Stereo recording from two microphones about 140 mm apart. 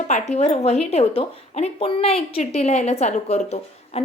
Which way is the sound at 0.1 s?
50° left (ahead or behind).